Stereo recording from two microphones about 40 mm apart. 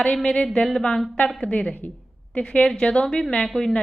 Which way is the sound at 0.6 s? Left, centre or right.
Centre.